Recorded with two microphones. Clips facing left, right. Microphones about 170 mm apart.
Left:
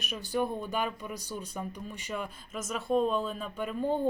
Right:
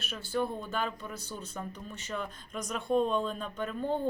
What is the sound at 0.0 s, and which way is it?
Speech, 15° left (ahead or behind).